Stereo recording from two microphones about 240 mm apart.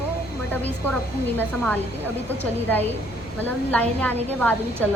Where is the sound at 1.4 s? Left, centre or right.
Centre.